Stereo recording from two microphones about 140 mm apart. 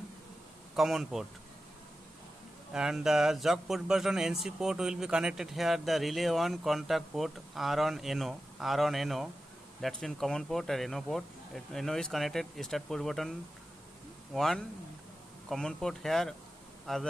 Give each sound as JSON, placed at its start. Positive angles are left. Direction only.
{"t": 0.7, "sound": "speech", "side_deg": 0}
{"t": 2.7, "sound": "speech", "side_deg": -5}
{"t": 14.3, "sound": "speech", "side_deg": 0}